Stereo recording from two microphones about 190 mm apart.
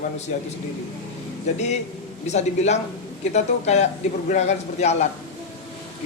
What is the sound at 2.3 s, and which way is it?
A man's voice, 35° left (ahead or behind).